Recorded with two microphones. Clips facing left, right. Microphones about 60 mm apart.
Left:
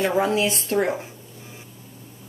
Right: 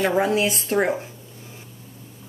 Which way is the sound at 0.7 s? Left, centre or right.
Centre.